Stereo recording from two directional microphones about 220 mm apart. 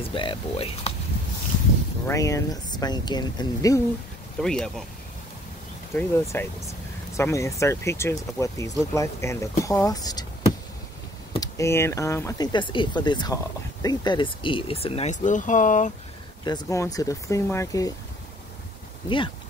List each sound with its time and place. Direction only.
0.0 s speech: 25° left (ahead or behind)
2.0 s speech: 15° left (ahead or behind)
4.4 s speech: centre (ahead or behind)
5.9 s speech: 10° left (ahead or behind)
11.3 s speech: 15° left (ahead or behind); by 15.9 s 35° left (ahead or behind)
16.4 s speech: 15° left (ahead or behind)
19.0 s speech: 20° left (ahead or behind)